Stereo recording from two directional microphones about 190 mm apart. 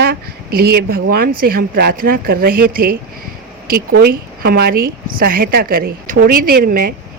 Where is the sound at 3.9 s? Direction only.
55° right (ahead or behind).